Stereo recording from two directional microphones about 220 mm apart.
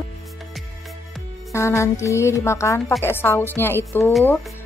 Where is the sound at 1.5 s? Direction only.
15° left (ahead or behind).